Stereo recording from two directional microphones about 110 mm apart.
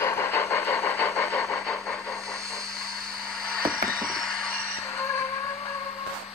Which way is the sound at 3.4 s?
5° left (ahead or behind).